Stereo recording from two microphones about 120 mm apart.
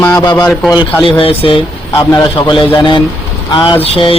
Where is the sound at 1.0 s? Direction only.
50° left (ahead or behind).